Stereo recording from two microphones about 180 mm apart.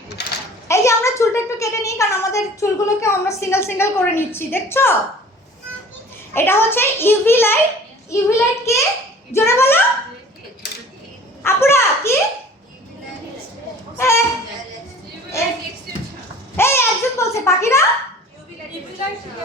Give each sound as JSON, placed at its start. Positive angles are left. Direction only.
{"t": 0.2, "sound": "a sound", "side_deg": 65}
{"t": 0.7, "sound": "a woman's voice", "side_deg": 15}
{"t": 6.3, "sound": "a woman's voice", "side_deg": 10}
{"t": 11.4, "sound": "a woman's voice", "side_deg": 15}
{"t": 14.0, "sound": "a woman's voice", "side_deg": 15}
{"t": 16.6, "sound": "a sound", "side_deg": 15}